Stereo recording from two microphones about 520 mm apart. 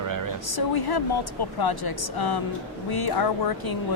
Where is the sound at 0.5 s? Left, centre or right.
Left.